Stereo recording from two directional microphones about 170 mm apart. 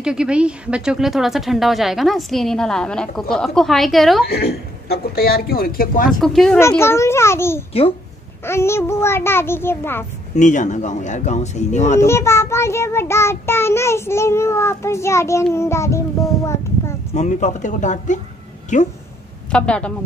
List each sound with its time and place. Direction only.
0.0 s speech: 5° right (ahead or behind)
4.3 s a man's voice: 65° left (ahead or behind)
6.2 s speech: 5° left (ahead or behind)
6.7 s child singing: 15° left (ahead or behind)
10.3 s speech: 45° left (ahead or behind)
12.1 s child singing: 15° left (ahead or behind)
17.1 s speech: 45° left (ahead or behind)
19.5 s child singing: 5° left (ahead or behind)